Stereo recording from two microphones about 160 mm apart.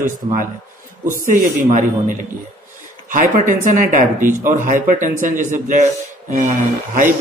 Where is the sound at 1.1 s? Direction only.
55° right (ahead or behind).